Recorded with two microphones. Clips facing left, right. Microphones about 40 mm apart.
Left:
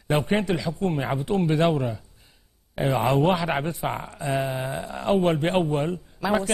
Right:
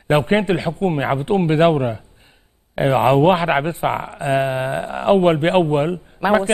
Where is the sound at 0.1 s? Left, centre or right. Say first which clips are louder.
Right 7 dB; right.